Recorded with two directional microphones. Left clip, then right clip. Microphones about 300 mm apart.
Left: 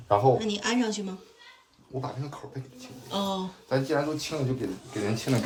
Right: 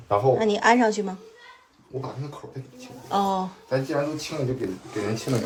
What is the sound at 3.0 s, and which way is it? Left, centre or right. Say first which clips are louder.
Speech: right 7 dB; centre.